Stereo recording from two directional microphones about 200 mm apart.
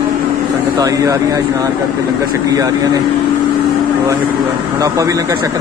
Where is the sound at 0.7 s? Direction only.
15° right (ahead or behind).